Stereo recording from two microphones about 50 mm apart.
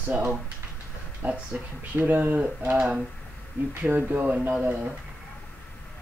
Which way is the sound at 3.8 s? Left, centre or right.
Right.